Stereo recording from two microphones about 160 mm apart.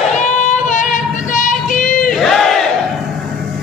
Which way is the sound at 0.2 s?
50° left (ahead or behind).